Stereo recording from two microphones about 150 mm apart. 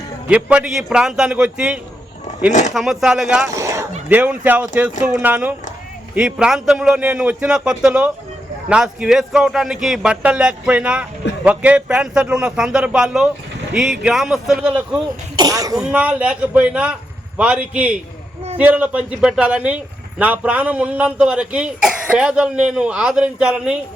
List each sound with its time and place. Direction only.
0.3 s a man's voice: 10° right (ahead or behind)
2.5 s speech: 55° left (ahead or behind)
2.7 s a man's voice: centre (ahead or behind)
3.5 s a sound: 20° right (ahead or behind)
4.1 s a man's voice: 10° right (ahead or behind)
15.4 s speech: 25° right (ahead or behind)
15.8 s a man's voice: 10° right (ahead or behind)